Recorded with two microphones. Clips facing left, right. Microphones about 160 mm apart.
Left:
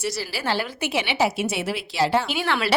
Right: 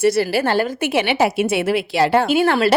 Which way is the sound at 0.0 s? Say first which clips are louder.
Right 12 dB; 55° right (ahead or behind).